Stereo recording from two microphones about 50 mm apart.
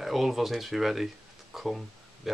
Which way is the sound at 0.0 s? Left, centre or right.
Centre.